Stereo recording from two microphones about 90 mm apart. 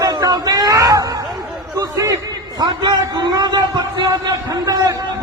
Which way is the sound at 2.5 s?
55° right (ahead or behind).